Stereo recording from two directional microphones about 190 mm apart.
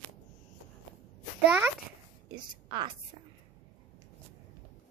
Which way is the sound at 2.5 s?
25° right (ahead or behind).